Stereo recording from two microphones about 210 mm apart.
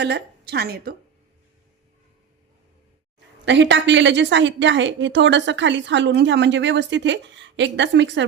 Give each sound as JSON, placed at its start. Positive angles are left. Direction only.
{"t": 0.0, "sound": "a woman's voice", "side_deg": -50}
{"t": 3.4, "sound": "a woman's voice", "side_deg": -60}